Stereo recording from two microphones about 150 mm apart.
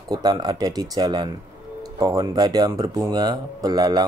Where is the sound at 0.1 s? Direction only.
25° right (ahead or behind).